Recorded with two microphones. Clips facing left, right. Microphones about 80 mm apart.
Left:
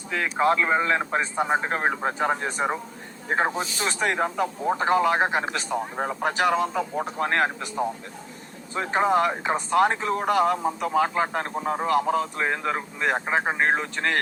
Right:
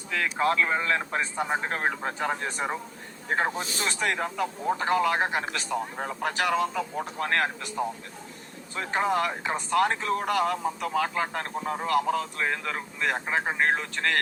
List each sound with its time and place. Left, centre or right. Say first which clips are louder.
0.1 s speech: left 3 dB; left